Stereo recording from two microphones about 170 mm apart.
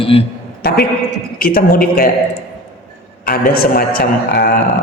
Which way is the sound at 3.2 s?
60° left (ahead or behind).